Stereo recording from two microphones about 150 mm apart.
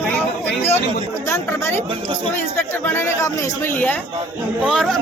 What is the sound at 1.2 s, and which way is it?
Speech, 15° left (ahead or behind).